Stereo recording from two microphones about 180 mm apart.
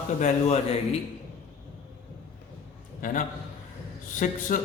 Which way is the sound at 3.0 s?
45° left (ahead or behind).